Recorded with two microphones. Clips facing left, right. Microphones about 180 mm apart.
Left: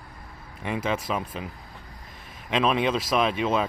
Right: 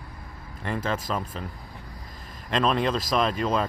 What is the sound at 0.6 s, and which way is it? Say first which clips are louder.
Speech: left 1 dB; 5° left (ahead or behind).